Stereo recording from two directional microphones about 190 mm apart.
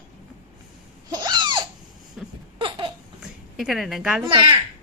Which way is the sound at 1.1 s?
20° right (ahead or behind).